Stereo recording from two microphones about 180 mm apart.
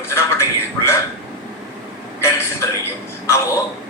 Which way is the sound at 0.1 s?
15° left (ahead or behind).